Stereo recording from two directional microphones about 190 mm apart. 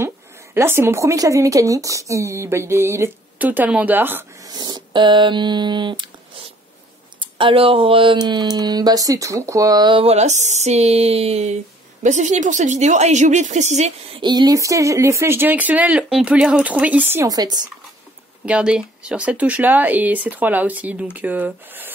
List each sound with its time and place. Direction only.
0.6 s speech: 15° right (ahead or behind)
7.2 s speech: 25° right (ahead or behind)
14.2 s speech: 20° right (ahead or behind)
18.4 s speech: 5° right (ahead or behind)